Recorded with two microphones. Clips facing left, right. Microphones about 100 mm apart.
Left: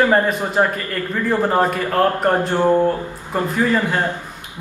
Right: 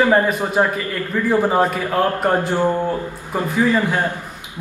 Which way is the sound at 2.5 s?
15° left (ahead or behind).